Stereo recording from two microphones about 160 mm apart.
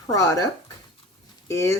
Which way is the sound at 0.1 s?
20° left (ahead or behind).